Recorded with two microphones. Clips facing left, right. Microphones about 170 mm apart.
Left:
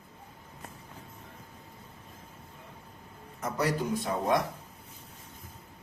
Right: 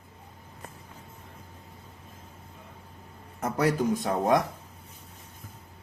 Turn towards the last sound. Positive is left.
turn(degrees=-50)  # may be behind; listen again after turning